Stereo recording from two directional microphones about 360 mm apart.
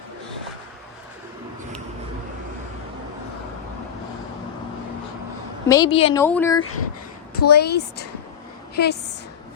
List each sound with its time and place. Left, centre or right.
5.6 s a woman's voice: centre
7.3 s a woman's voice: left